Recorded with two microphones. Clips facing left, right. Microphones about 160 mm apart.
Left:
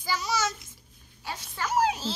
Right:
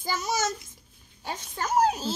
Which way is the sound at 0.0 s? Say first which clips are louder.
Right 1 dB; 50° right (ahead or behind).